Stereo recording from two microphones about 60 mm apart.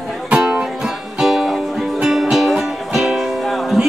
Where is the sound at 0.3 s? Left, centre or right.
Centre.